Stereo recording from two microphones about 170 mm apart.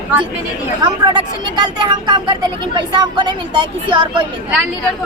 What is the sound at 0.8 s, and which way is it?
Speech, 25° right (ahead or behind).